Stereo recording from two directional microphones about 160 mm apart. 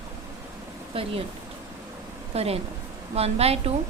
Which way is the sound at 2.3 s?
40° right (ahead or behind).